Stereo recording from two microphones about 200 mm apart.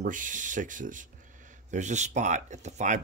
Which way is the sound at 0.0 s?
40° right (ahead or behind).